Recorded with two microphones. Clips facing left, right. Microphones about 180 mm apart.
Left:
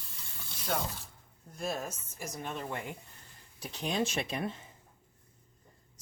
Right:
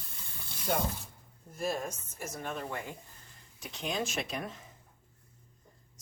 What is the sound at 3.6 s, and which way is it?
Speech, 35° left (ahead or behind).